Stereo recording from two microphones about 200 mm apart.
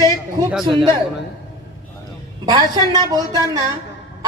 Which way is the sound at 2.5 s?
20° right (ahead or behind).